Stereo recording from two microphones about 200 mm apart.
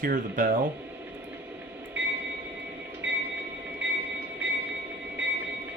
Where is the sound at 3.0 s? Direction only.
5° right (ahead or behind).